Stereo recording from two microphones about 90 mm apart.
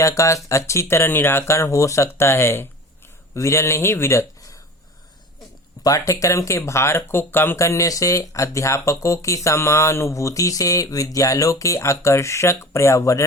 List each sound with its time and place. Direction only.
0.0 s speech: 35° left (ahead or behind)
5.8 s speech: 40° left (ahead or behind)